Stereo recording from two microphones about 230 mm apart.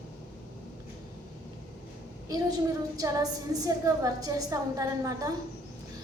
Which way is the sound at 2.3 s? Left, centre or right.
Centre.